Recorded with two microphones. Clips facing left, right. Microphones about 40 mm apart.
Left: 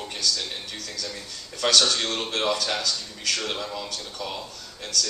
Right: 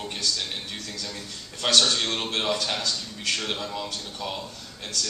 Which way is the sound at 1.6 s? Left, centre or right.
Centre.